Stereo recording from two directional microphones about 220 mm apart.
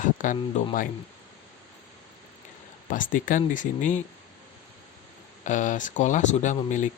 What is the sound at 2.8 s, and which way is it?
Speech, 35° left (ahead or behind).